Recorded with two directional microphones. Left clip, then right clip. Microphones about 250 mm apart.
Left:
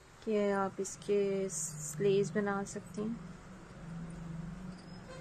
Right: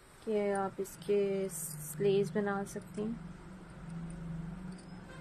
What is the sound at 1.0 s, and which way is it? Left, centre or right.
Speech, centre.